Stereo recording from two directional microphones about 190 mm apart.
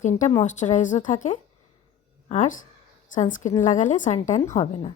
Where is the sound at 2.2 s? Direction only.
40° left (ahead or behind).